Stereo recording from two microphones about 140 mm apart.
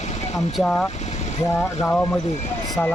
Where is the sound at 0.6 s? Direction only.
5° left (ahead or behind).